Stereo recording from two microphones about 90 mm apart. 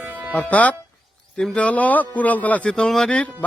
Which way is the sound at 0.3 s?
20° left (ahead or behind).